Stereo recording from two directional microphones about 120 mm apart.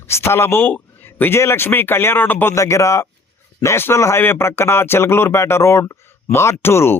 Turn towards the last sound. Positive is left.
turn(degrees=20)  # may be behind; listen again after turning